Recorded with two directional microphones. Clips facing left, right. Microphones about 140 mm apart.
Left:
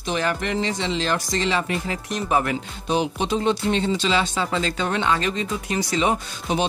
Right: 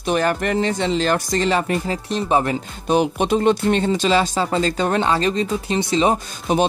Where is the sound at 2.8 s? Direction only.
55° right (ahead or behind); by 6.1 s 30° right (ahead or behind).